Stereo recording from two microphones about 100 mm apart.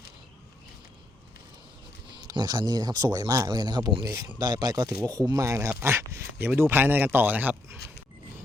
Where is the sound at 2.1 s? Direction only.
45° right (ahead or behind); by 7.8 s 15° right (ahead or behind).